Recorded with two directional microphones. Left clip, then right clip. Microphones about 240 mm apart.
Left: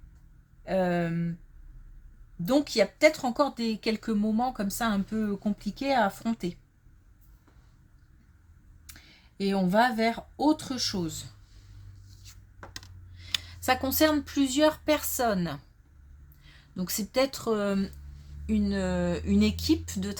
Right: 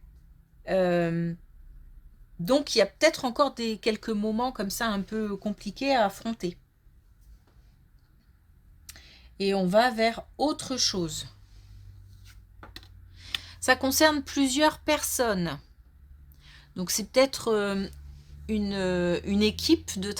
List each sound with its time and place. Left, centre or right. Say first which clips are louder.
0.6 s speech: right 3 dB; right
2.4 s speech: right 2 dB; right
8.9 s speech: right 2 dB; right
12.2 s a sound: left 2 dB; centre
13.4 s speech: right 4 dB; right